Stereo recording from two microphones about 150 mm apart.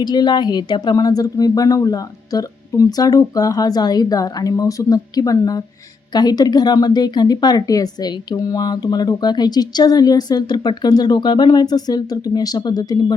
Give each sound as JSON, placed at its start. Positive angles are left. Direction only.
{"t": 0.0, "sound": "speech", "side_deg": 30}